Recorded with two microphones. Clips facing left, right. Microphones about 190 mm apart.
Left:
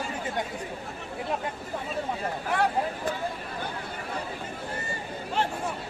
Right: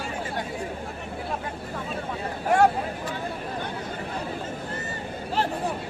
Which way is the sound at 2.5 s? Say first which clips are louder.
Right 8 dB; 45° right (ahead or behind).